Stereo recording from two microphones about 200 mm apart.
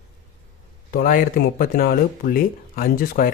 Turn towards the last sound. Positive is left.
turn(degrees=45)  # may be behind; listen again after turning